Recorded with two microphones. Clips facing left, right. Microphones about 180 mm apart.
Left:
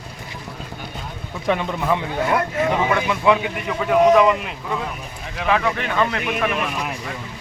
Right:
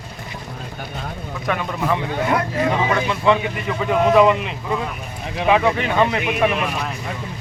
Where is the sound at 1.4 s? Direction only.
25° left (ahead or behind).